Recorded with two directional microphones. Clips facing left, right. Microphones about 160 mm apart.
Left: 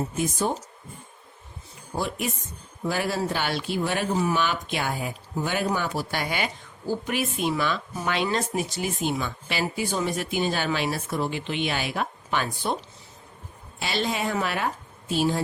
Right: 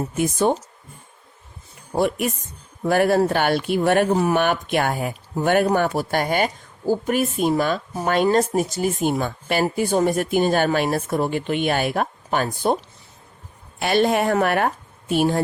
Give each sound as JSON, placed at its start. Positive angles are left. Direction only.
{"t": 0.2, "sound": "speech", "side_deg": -65}
{"t": 2.0, "sound": "a woman's voice", "side_deg": -60}